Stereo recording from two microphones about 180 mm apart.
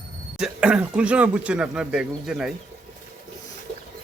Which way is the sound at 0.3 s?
5° right (ahead or behind).